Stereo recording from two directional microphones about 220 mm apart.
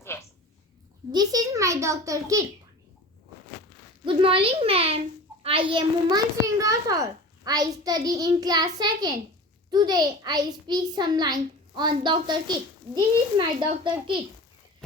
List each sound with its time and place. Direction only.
0.1 s a sound: 10° left (ahead or behind)
1.1 s a child's voice: 15° right (ahead or behind)
4.0 s a child's voice: 25° right (ahead or behind)